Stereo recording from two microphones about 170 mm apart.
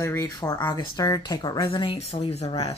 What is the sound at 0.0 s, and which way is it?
Speech, 15° left (ahead or behind).